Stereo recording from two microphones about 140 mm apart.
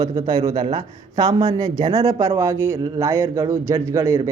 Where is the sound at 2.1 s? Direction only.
20° right (ahead or behind).